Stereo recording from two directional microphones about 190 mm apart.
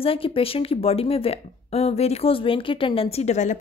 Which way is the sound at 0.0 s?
30° left (ahead or behind).